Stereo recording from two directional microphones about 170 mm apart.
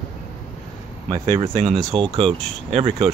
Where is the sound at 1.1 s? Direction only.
25° right (ahead or behind).